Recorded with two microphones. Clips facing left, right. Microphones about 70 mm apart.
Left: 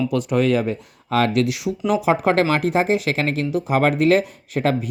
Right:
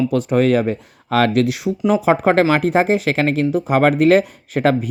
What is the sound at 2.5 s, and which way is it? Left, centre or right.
Speech, right.